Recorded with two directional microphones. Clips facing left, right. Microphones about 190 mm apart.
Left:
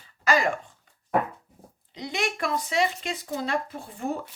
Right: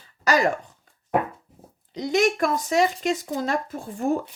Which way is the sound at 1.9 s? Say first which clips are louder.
Right 9 dB; 45° right (ahead or behind).